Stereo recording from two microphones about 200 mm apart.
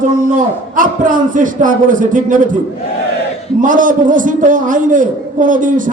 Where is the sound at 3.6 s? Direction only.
40° right (ahead or behind).